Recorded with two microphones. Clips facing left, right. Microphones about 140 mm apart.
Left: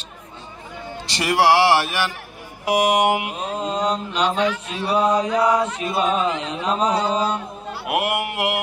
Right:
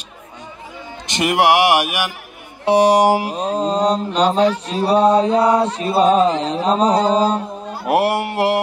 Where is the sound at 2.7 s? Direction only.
35° right (ahead or behind).